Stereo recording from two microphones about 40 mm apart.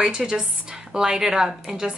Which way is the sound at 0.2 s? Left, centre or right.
Centre.